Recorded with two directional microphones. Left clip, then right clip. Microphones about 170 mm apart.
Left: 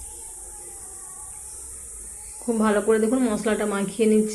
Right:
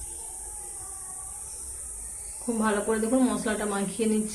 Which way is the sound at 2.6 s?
30° left (ahead or behind).